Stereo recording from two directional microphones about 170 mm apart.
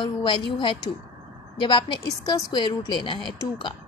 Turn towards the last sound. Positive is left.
turn(degrees=25)  # may be behind; listen again after turning